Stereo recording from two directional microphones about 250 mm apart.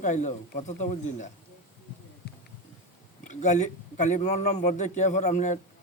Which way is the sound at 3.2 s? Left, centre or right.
Left.